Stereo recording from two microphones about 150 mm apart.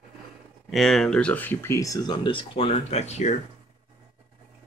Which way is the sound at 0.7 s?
Centre (ahead or behind).